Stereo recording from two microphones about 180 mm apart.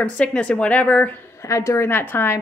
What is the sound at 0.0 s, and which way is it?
A woman's voice, 5° left (ahead or behind).